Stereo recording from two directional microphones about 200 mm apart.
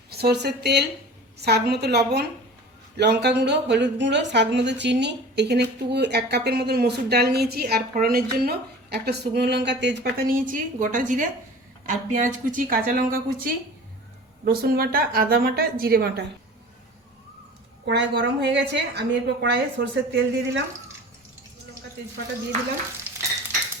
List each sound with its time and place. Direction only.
0.1 s a woman's voice: 55° right (ahead or behind)
17.8 s speech: 55° right (ahead or behind)